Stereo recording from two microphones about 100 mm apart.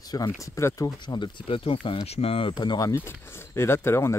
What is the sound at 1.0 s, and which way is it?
Speech, 50° left (ahead or behind).